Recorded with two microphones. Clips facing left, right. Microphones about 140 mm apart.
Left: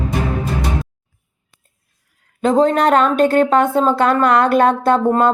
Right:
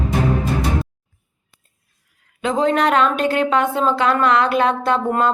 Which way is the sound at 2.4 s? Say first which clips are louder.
Left 4 dB; 40° left (ahead or behind).